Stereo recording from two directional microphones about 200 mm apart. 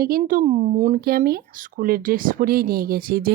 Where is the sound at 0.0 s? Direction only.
45° right (ahead or behind).